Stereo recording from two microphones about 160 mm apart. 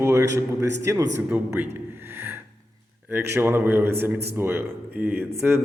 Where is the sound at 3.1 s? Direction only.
15° right (ahead or behind).